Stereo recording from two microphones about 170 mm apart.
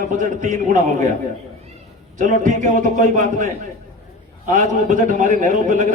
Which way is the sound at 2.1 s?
45° right (ahead or behind).